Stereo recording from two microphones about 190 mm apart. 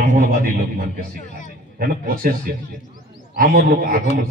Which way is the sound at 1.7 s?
50° right (ahead or behind).